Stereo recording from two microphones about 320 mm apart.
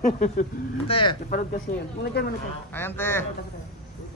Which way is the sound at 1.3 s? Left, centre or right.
Left.